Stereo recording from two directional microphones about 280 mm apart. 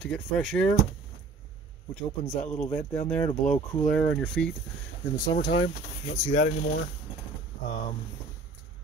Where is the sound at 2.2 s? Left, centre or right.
Left.